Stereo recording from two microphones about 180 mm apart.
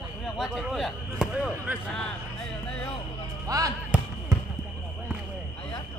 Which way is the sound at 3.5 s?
20° right (ahead or behind).